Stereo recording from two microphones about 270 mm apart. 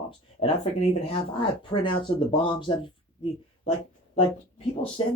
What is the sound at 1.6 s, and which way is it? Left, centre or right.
Speech, centre.